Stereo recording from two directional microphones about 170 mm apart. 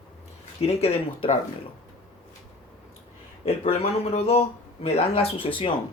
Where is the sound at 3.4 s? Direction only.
40° left (ahead or behind).